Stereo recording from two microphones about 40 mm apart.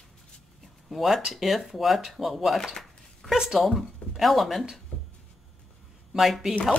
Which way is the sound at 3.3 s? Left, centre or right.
Centre.